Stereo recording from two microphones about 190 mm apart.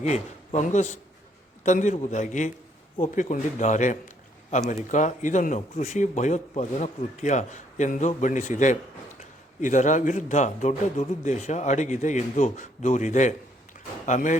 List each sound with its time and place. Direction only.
0.0 s a man's voice: 35° left (ahead or behind)